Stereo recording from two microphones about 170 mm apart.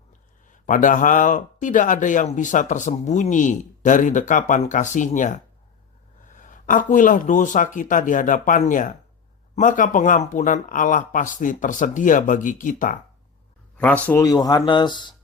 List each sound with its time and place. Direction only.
0.4 s speech: 50° left (ahead or behind)
13.7 s speech: 10° left (ahead or behind); by 15.1 s 25° left (ahead or behind)